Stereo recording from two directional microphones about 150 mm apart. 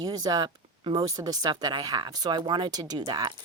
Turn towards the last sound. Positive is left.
turn(degrees=-30)  # may be behind; listen again after turning